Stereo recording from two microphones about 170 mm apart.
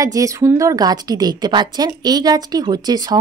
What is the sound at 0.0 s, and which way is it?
A woman's voice, 20° right (ahead or behind).